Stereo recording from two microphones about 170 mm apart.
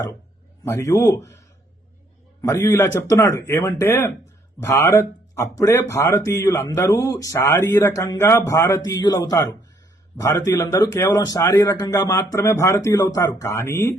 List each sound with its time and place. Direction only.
0.6 s speech: 15° left (ahead or behind)
2.4 s speech: 15° left (ahead or behind)